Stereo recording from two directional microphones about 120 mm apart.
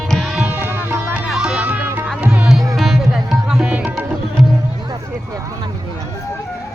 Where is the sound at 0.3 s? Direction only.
15° right (ahead or behind).